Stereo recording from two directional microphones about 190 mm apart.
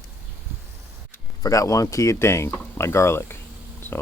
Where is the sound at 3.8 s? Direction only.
10° left (ahead or behind).